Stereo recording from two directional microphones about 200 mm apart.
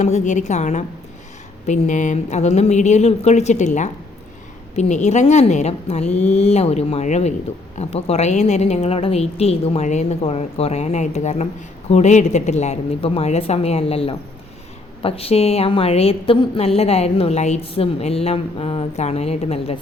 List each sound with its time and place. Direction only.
0.0 s a woman's voice: 35° left (ahead or behind)